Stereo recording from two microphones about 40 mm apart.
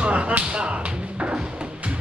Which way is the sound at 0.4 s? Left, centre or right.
Right.